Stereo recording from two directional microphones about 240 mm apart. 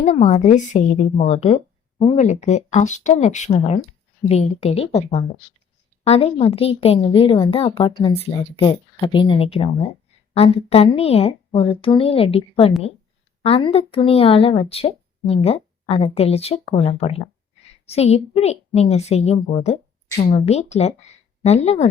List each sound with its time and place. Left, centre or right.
0.0 s a woman's voice: left